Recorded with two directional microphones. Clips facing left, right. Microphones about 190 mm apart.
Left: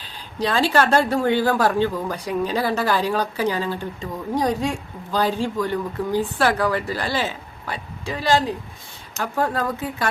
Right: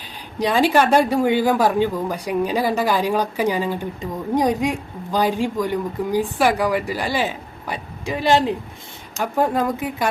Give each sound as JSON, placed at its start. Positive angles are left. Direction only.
{"t": 0.3, "sound": "a woman's voice", "side_deg": -15}